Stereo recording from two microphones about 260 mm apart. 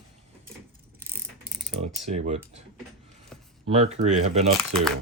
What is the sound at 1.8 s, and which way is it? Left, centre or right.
Speech, right.